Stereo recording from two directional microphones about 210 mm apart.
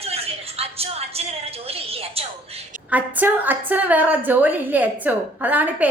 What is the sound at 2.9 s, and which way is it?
A woman's voice, 10° right (ahead or behind).